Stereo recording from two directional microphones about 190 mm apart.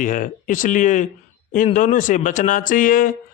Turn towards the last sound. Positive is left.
turn(degrees=45)  # may be behind; listen again after turning